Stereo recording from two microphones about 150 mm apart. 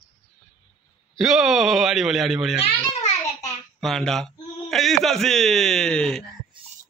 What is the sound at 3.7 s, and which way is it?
Speech, 5° left (ahead or behind).